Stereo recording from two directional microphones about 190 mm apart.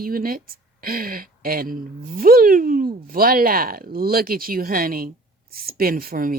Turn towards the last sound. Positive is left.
turn(degrees=-50)  # may be behind; listen again after turning